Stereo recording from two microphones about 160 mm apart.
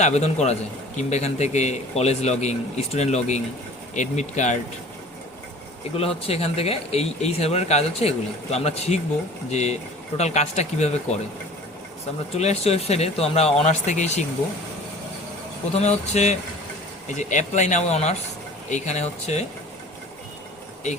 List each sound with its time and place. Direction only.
0.0 s a man's voice: 45° left (ahead or behind)
6.0 s a man's voice: 40° left (ahead or behind)
12.3 s a man's voice: 40° left (ahead or behind)
15.7 s a man's voice: 45° left (ahead or behind)